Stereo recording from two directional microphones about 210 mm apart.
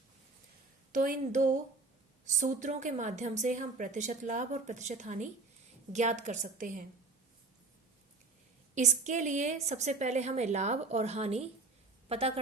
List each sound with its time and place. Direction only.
0.9 s a woman's voice: 40° right (ahead or behind)
8.7 s a woman's voice: 35° right (ahead or behind)